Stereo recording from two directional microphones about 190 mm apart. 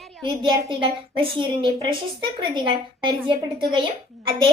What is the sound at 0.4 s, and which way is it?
A woman's voice, 25° right (ahead or behind).